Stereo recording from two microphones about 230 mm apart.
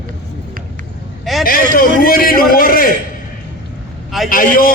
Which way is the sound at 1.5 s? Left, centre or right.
Left.